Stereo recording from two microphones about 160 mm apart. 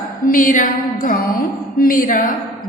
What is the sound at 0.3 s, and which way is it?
A woman's voice, 55° left (ahead or behind).